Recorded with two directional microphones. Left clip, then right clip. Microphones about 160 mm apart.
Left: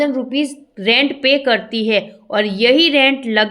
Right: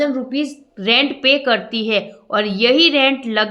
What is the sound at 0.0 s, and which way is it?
A woman's voice, 25° left (ahead or behind).